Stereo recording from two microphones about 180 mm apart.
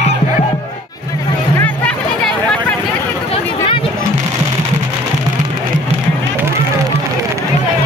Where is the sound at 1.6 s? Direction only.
5° left (ahead or behind).